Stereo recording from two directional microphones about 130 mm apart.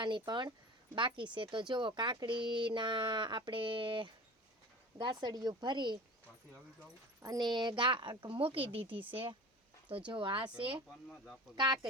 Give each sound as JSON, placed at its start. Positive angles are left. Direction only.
{"t": 0.0, "sound": "speech", "side_deg": -35}
{"t": 7.2, "sound": "speech", "side_deg": -30}
{"t": 10.1, "sound": "speech", "side_deg": -40}